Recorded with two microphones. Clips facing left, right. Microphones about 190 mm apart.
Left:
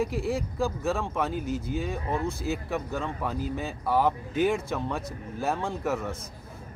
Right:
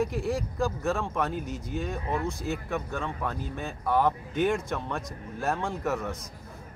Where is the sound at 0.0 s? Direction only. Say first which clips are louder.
Even; centre (ahead or behind).